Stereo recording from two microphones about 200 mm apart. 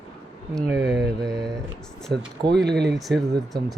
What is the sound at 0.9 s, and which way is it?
Mantra, centre (ahead or behind).